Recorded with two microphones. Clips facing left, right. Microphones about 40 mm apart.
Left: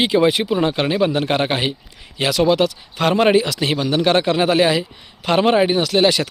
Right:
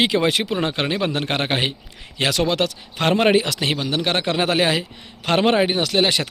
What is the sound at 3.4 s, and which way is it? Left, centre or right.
Speech, right.